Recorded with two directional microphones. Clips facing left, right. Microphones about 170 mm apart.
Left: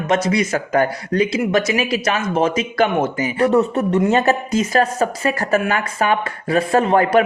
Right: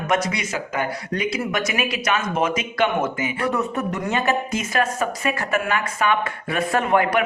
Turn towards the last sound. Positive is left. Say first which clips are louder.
# left 5 dB
turn(degrees=35)  # may be behind; listen again after turning